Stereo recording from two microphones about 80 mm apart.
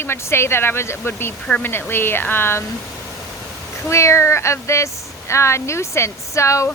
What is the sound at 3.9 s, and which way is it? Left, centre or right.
Speech, left.